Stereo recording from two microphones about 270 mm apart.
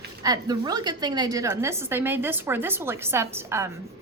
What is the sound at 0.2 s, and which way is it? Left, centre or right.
A woman's voice, centre.